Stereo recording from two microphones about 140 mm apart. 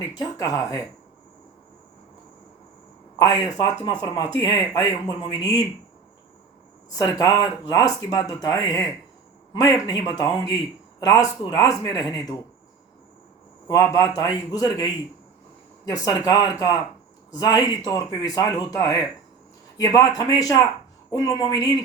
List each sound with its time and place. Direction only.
0.2 s speech: 25° left (ahead or behind)
3.2 s speech: 25° left (ahead or behind)
6.9 s speech: 25° left (ahead or behind)
13.7 s speech: 25° left (ahead or behind)